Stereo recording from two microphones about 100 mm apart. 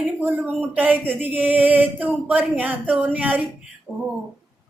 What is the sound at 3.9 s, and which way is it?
Speech, centre (ahead or behind).